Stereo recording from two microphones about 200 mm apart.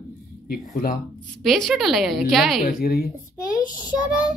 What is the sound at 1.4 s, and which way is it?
A woman's voice, centre (ahead or behind).